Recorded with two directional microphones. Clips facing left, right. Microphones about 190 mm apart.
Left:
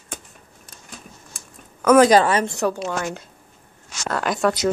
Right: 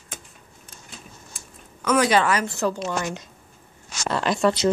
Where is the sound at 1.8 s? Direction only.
50° left (ahead or behind); by 2.4 s 35° left (ahead or behind).